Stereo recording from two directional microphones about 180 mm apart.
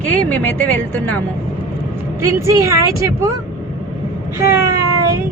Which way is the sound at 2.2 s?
15° right (ahead or behind).